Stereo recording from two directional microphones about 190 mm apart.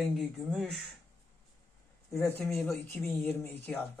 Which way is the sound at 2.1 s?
10° left (ahead or behind).